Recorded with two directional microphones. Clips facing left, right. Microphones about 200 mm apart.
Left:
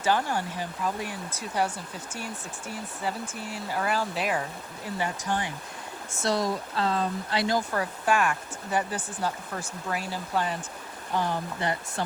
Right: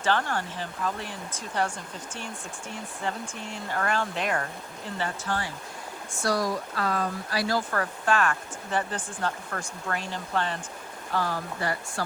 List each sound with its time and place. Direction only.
0.0 s speech: 10° left (ahead or behind)
11.1 s speech: 20° left (ahead or behind)